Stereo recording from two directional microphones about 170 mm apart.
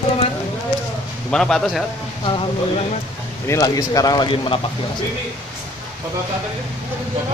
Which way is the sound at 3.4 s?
20° left (ahead or behind).